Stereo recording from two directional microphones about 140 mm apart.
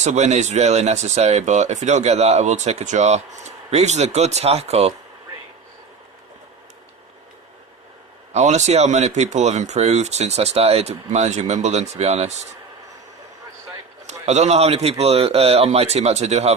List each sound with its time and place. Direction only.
0.0 s speech: 55° right (ahead or behind)
8.3 s speech: 55° right (ahead or behind)
14.1 s speech: 50° right (ahead or behind)